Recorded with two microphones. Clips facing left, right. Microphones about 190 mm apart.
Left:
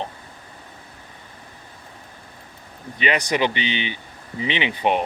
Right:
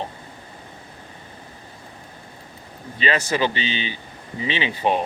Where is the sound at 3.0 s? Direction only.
15° left (ahead or behind).